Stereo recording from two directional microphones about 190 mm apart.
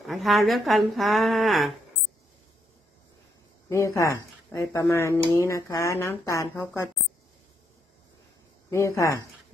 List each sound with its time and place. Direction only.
0.0 s a woman's voice: centre (ahead or behind)
3.7 s speech: 15° left (ahead or behind)
8.7 s speech: 15° left (ahead or behind)